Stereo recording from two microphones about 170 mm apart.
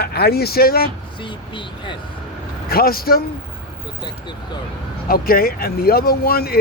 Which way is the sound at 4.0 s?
25° left (ahead or behind).